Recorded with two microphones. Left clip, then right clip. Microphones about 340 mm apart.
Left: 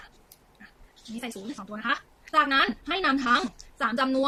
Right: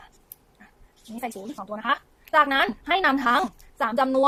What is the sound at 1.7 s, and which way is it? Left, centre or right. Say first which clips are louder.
A woman's voice: right 4 dB; centre.